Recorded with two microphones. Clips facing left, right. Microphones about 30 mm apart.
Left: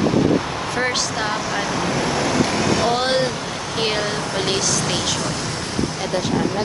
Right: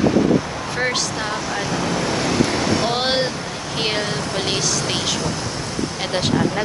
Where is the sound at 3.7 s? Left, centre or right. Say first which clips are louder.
Even; centre.